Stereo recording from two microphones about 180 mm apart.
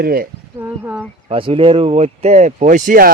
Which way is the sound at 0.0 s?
55° right (ahead or behind).